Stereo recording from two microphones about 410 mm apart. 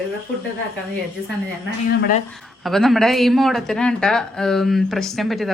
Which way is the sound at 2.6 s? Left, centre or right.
Centre.